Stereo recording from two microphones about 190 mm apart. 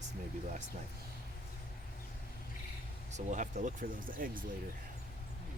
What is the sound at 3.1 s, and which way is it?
Speech, 40° right (ahead or behind).